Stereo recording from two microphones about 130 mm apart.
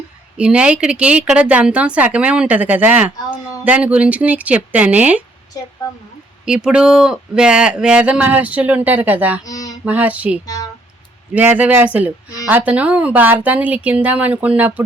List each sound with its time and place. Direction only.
0.3 s speech: 10° right (ahead or behind)
5.5 s a woman's voice: 30° left (ahead or behind)
6.4 s speech: 5° right (ahead or behind)
9.4 s a sound: 25° left (ahead or behind)
9.8 s speech: 10° right (ahead or behind)
10.4 s a sound: 25° left (ahead or behind)
11.3 s speech: 10° right (ahead or behind)